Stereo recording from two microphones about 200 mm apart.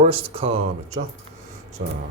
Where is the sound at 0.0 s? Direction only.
30° right (ahead or behind).